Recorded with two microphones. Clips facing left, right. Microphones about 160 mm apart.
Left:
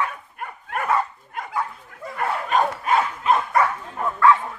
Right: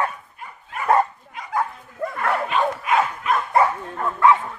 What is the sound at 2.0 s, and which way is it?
Dog, 60° right (ahead or behind).